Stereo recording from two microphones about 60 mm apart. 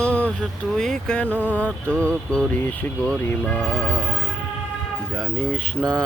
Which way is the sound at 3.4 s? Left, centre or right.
Left.